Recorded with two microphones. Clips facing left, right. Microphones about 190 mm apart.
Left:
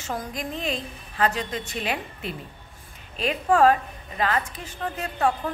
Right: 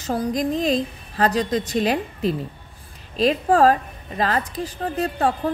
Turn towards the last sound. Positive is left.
turn(degrees=-35)  # may be behind; listen again after turning